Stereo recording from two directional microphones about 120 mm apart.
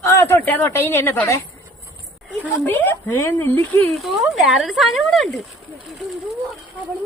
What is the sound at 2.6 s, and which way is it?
Speech, 15° left (ahead or behind).